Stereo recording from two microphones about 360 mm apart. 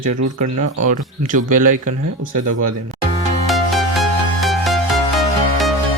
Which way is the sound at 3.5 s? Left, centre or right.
Centre.